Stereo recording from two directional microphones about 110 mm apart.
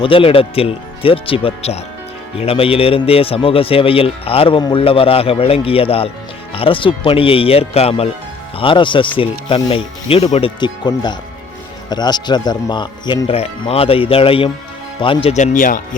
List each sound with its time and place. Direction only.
0.0 s speech: 55° left (ahead or behind)
8.5 s speech: 50° left (ahead or behind)
9.6 s speech: 65° left (ahead or behind)
10.6 s speech: 40° left (ahead or behind)
13.3 s speech: 60° left (ahead or behind)
15.3 s speech: 90° left